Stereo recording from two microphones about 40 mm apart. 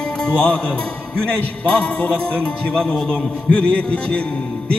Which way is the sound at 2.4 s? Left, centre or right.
Centre.